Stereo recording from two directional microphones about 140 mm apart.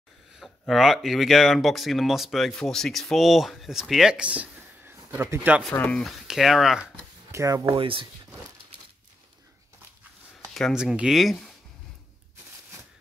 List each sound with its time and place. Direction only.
0.4 s speech: centre (ahead or behind)
5.7 s speech: 10° left (ahead or behind)
7.2 s speech: 20° right (ahead or behind)
7.7 s speech: 40° right (ahead or behind)
10.5 s speech: centre (ahead or behind)